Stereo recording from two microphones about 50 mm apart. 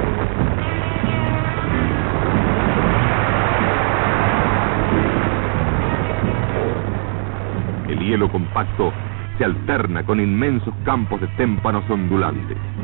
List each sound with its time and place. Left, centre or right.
0.0 s music: left
7.9 s a man's voice: left